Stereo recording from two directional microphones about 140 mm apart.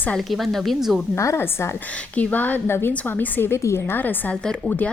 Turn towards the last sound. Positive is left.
turn(degrees=10)  # may be behind; listen again after turning